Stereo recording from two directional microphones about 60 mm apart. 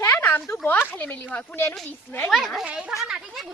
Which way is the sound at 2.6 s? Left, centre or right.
Centre.